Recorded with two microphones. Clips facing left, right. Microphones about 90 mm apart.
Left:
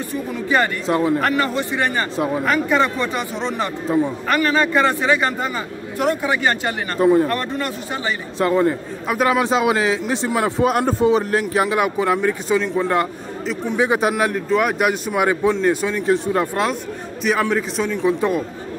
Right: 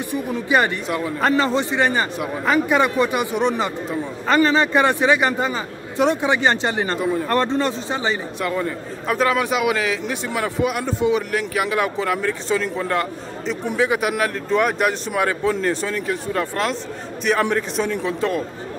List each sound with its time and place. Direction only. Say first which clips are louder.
0.1 s speech: right 1 dB; 15° right (ahead or behind)
0.8 s a man's voice: left 6 dB; 35° left (ahead or behind)
1.2 s a man's voice: right 1 dB; 25° right (ahead or behind)
8.4 s a man's voice: left 6 dB; 30° left (ahead or behind)
9.0 s speech: even; 5° left (ahead or behind)
9.3 s a man's voice: left 2 dB; 30° left (ahead or behind)
11.7 s speech: left 3 dB; 20° left (ahead or behind)
14.5 s speech: even; 5° left (ahead or behind)
17.2 s a man's voice: even; 5° left (ahead or behind)